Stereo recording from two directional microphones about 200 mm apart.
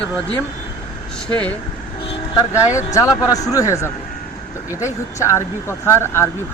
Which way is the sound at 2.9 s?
15° left (ahead or behind).